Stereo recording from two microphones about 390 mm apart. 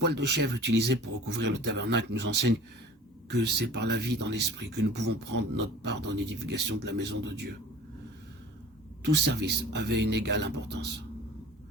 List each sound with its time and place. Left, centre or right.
0.0 s speech: right
9.0 s speech: right